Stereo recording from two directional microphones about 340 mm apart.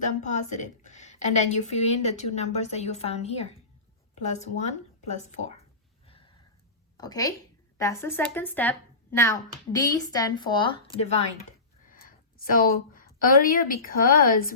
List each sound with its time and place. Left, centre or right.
0.2 s a woman's voice: left
6.9 s a woman's voice: centre
11.9 s a sound: left
14.3 s a woman's voice: left